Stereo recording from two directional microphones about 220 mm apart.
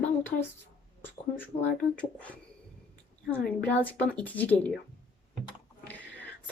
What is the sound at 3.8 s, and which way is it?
Speech, 5° left (ahead or behind).